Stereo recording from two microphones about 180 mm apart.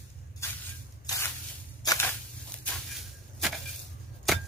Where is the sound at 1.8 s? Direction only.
20° left (ahead or behind).